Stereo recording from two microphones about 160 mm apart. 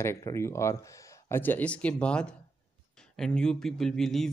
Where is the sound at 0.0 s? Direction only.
15° left (ahead or behind).